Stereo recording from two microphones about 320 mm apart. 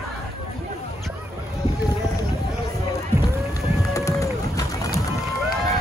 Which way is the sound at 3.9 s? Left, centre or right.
Centre.